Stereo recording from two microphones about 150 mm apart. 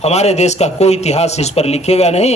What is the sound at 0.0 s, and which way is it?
Speech, 45° left (ahead or behind).